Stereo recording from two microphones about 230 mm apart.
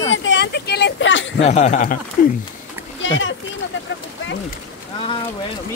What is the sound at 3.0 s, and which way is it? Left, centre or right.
Speech, left.